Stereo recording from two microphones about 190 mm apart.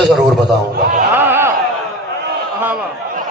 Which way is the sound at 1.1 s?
10° right (ahead or behind).